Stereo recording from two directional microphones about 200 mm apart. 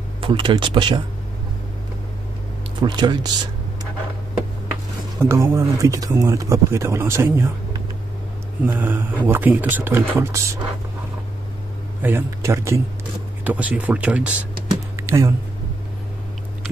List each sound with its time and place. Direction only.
0.2 s speech: 25° right (ahead or behind)
2.8 s speech: 20° right (ahead or behind)
5.2 s a man's voice: 15° right (ahead or behind)
12.0 s a man's voice: 10° right (ahead or behind)
15.0 s a sound: 15° right (ahead or behind)